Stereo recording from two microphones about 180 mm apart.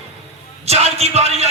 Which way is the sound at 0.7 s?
35° right (ahead or behind).